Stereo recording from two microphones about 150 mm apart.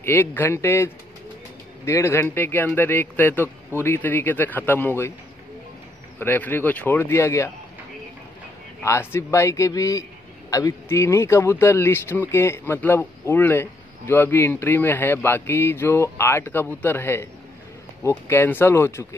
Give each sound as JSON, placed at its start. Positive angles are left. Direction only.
{"t": 0.0, "sound": "a man's voice", "side_deg": 15}
{"t": 6.1, "sound": "a man's voice", "side_deg": 15}
{"t": 8.8, "sound": "a man's voice", "side_deg": 20}